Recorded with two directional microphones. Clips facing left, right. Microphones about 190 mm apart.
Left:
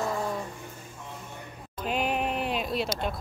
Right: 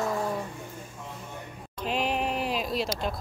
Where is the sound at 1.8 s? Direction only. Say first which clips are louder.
Even; centre (ahead or behind).